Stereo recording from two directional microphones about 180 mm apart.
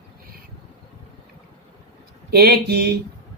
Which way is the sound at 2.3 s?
60° right (ahead or behind).